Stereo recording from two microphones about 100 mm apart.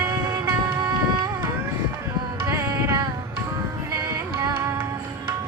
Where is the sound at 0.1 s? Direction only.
40° right (ahead or behind).